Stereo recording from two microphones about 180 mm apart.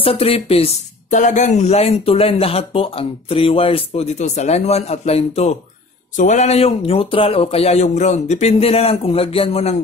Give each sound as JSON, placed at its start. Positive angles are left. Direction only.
{"t": 0.0, "sound": "speech", "side_deg": 30}